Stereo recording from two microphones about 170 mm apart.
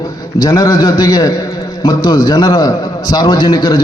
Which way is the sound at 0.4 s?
20° left (ahead or behind).